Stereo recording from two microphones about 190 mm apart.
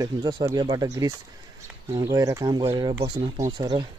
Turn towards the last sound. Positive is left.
turn(degrees=-25)  # may be behind; listen again after turning